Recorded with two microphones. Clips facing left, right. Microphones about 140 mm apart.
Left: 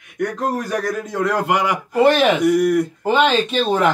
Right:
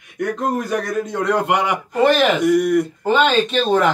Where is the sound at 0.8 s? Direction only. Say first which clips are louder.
Even; centre (ahead or behind).